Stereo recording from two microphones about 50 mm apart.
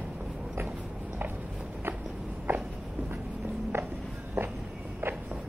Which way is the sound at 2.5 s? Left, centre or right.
Right.